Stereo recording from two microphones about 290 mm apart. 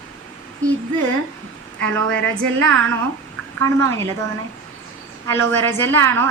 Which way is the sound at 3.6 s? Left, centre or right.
Centre.